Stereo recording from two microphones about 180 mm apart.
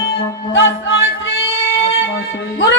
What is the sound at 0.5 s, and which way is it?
Chant, 90° left.